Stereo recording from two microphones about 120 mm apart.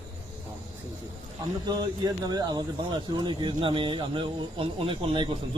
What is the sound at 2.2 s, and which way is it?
Speech, 35° right (ahead or behind).